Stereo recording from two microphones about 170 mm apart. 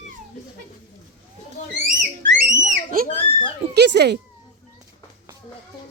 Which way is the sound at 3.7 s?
80° right.